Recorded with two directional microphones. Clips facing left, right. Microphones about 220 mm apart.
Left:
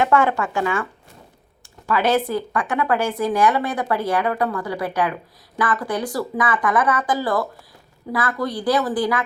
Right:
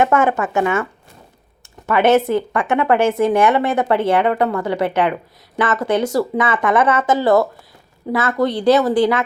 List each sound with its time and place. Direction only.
0.0 s speech: 20° right (ahead or behind)